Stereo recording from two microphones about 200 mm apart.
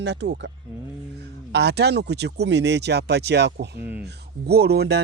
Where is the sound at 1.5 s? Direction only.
55° right (ahead or behind).